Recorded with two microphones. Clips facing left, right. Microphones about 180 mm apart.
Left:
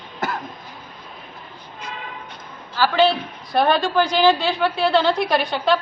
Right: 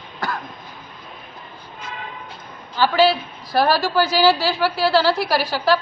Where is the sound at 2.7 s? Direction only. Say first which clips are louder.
Right 1 dB; 10° right (ahead or behind).